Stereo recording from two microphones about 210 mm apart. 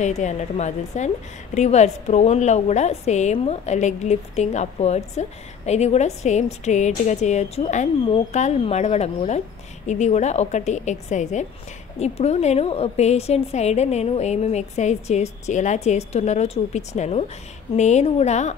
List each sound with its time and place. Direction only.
0.0 s a woman's voice: 35° left (ahead or behind)